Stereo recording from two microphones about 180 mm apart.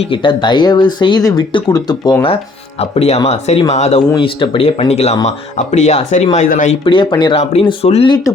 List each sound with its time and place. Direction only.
0.0 s speech: 30° left (ahead or behind); by 6.7 s 45° left (ahead or behind)
6.8 s speech: 25° left (ahead or behind)